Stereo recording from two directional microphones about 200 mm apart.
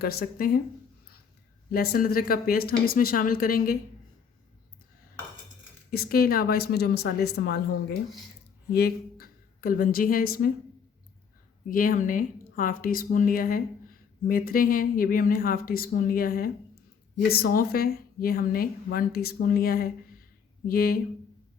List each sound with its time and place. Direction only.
0.0 s a woman's voice: 50° left (ahead or behind)
1.7 s a woman's voice: 50° left (ahead or behind)
5.9 s a woman's voice: 50° left (ahead or behind)
8.7 s a woman's voice: 50° left (ahead or behind)
11.7 s a woman's voice: 45° left (ahead or behind)